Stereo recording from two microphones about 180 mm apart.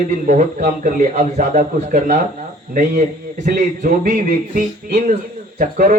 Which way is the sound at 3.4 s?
50° right (ahead or behind).